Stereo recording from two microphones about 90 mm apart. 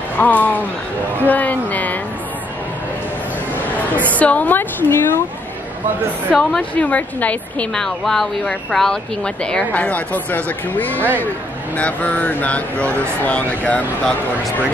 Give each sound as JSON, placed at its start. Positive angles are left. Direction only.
{"t": 0.2, "sound": "a woman's voice", "side_deg": 20}
{"t": 4.1, "sound": "a woman's voice", "side_deg": 15}
{"t": 6.3, "sound": "a woman's voice", "side_deg": 10}